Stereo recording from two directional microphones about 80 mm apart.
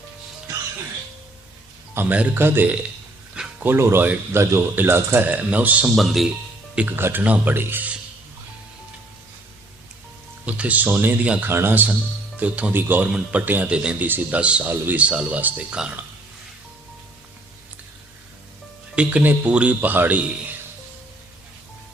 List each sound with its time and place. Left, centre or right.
2.0 s speech: centre
2.4 s speech: right
6.0 s speech: centre
6.9 s speech: right
10.4 s speech: centre
11.4 s speech: right
13.1 s speech: centre
13.4 s speech: right
18.9 s speech: centre